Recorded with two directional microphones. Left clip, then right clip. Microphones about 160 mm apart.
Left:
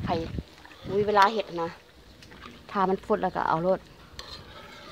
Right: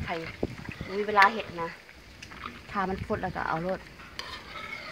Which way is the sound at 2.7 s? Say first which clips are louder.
Left 6 dB; 65° left (ahead or behind).